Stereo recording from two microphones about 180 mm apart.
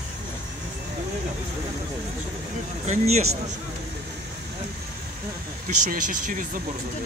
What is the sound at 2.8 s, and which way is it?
Speech, 40° right (ahead or behind).